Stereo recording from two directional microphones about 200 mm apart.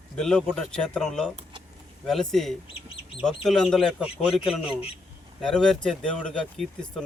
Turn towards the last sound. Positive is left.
turn(degrees=5)  # may be behind; listen again after turning